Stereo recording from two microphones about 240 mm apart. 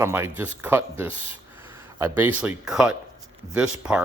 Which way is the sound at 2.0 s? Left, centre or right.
Centre.